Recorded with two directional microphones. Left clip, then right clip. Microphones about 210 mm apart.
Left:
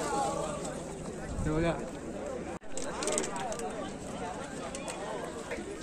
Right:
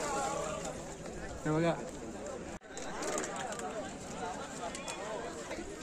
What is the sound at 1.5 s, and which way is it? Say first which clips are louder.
Speech: left 1 dB; 25° right (ahead or behind).